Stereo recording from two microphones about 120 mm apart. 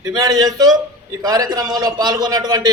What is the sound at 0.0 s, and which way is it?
A man's voice, 30° right (ahead or behind).